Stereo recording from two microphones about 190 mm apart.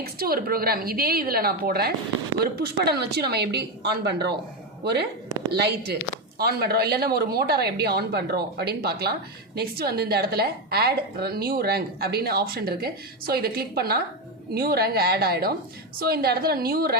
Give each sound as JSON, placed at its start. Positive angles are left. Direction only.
{"t": 0.0, "sound": "a woman's voice", "side_deg": -55}